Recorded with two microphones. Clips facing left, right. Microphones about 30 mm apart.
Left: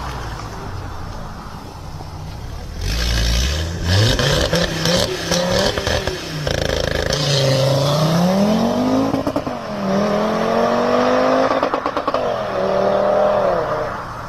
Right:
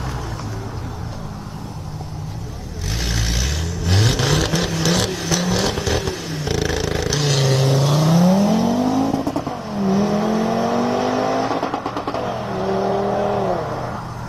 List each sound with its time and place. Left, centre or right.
2.8 s vehicle: left
12.1 s vehicle: centre